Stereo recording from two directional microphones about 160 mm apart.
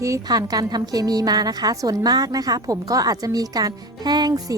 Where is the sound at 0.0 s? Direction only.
20° right (ahead or behind).